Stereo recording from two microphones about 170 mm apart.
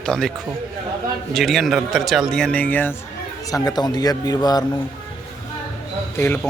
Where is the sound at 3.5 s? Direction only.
25° left (ahead or behind).